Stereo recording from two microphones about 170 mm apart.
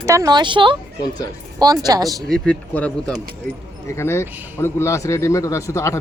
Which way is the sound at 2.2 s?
5° left (ahead or behind).